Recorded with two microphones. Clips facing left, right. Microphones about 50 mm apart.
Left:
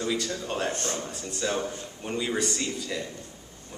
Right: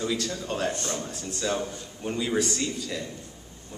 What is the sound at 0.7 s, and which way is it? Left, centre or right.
Speech, left.